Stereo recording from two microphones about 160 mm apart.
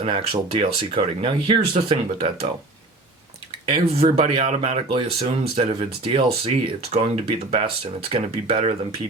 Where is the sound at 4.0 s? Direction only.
40° right (ahead or behind).